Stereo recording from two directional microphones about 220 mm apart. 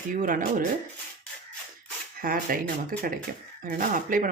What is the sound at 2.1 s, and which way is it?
Speech, 40° right (ahead or behind).